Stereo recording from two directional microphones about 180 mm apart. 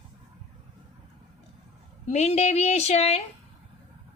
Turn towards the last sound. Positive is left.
turn(degrees=35)  # may be behind; listen again after turning